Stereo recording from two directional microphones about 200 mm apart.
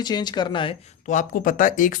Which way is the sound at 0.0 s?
20° left (ahead or behind).